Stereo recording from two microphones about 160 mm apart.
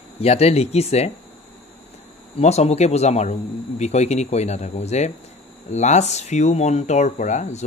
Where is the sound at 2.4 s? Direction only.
40° left (ahead or behind).